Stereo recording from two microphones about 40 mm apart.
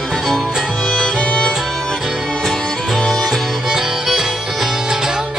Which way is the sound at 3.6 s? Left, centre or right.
Centre.